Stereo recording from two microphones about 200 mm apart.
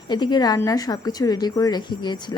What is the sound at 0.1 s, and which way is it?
A woman's voice, 20° left (ahead or behind).